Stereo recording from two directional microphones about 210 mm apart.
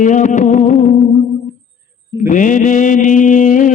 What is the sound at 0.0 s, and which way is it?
Music, 35° left (ahead or behind).